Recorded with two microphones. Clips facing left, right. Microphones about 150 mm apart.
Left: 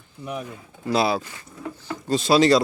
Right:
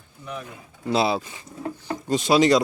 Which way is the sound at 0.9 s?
25° right (ahead or behind).